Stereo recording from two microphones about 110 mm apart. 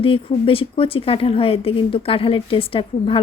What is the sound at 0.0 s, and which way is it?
A woman's voice, 55° left (ahead or behind).